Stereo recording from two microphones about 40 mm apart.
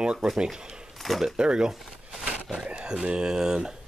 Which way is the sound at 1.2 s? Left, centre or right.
Right.